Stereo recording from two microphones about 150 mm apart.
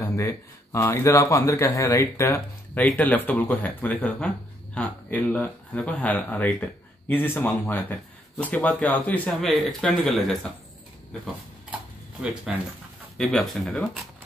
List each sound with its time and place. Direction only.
0.0 s speech: 20° left (ahead or behind); by 10.5 s centre (ahead or behind)
12.5 s speech: 5° right (ahead or behind)